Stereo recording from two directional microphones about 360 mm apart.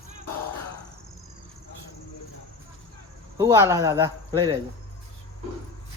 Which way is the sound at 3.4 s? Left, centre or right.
Centre.